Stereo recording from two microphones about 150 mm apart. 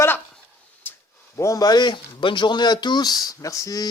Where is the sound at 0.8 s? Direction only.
15° left (ahead or behind).